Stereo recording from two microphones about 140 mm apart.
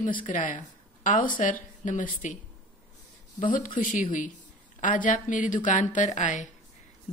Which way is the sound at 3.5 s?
70° left (ahead or behind).